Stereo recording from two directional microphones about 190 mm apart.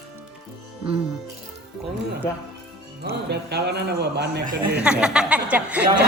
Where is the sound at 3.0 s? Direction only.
60° right (ahead or behind).